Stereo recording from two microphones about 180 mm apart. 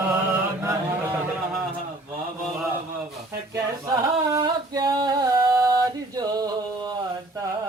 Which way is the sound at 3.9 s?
25° right (ahead or behind).